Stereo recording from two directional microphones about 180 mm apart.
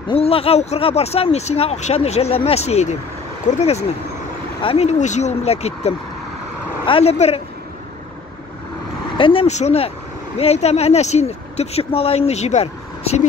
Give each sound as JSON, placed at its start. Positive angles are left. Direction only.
{"t": 0.1, "sound": "speech", "side_deg": 30}
{"t": 9.2, "sound": "speech", "side_deg": 30}